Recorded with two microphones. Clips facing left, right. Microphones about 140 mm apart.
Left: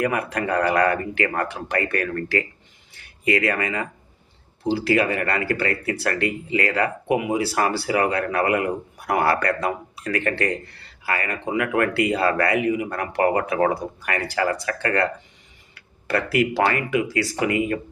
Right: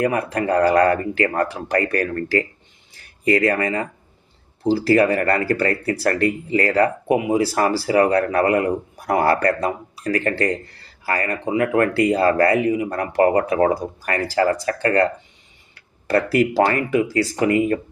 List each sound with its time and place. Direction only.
0.0 s speech: 30° right (ahead or behind)